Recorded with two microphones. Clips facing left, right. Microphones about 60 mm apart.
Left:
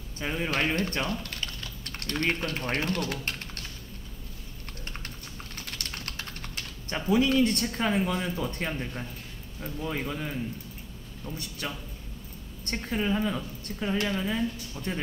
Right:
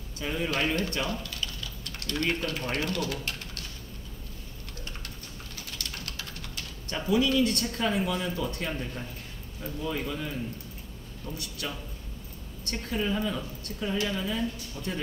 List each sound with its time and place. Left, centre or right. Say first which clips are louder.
0.2 s speech: even; left
0.5 s speech: left 1 dB; left
4.8 s typing: left 3 dB; left
6.9 s speech: left 1 dB; left
11.3 s a man's voice: left 1 dB; left